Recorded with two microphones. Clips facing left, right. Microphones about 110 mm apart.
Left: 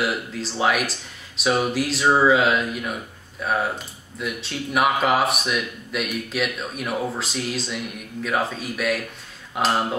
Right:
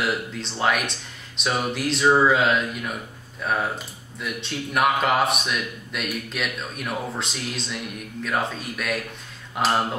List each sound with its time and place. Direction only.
0.0 s speech: 5° left (ahead or behind)